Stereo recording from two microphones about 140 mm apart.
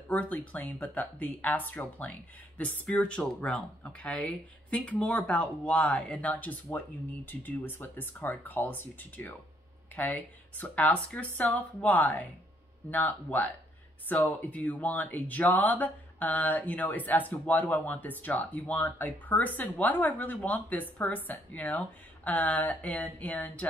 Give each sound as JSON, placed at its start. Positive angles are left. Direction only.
{"t": 0.1, "sound": "speech", "side_deg": 10}